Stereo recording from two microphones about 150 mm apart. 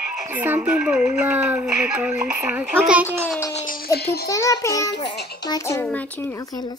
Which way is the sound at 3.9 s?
90° left.